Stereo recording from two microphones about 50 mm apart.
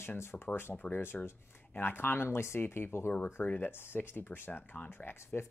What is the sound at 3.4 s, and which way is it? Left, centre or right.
Speech, left.